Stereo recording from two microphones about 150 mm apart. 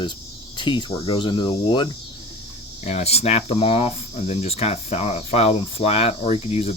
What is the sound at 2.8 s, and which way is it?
Speech, 45° left (ahead or behind).